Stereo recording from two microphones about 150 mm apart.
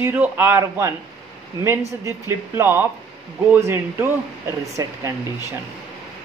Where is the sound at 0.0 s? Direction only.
10° right (ahead or behind).